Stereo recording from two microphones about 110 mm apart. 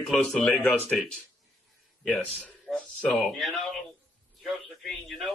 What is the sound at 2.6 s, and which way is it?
A man's voice, 5° left (ahead or behind).